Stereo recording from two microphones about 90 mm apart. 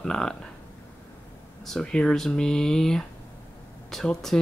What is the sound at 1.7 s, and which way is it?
Speech, 5° left (ahead or behind).